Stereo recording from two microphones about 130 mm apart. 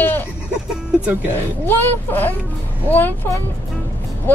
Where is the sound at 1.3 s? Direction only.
15° left (ahead or behind).